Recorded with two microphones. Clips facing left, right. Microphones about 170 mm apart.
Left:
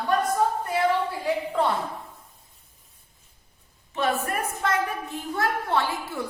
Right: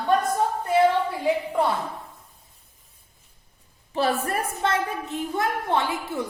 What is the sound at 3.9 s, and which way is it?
A woman's voice, 35° right (ahead or behind).